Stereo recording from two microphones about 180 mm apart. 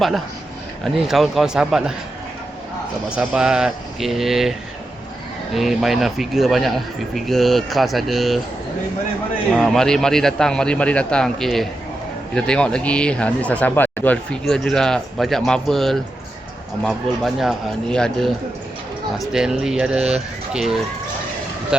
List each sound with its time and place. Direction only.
0.9 s speech: centre (ahead or behind)
3.1 s speech: 5° right (ahead or behind)
5.5 s speech: centre (ahead or behind)
9.5 s speech: centre (ahead or behind)
19.3 s speech: 5° right (ahead or behind)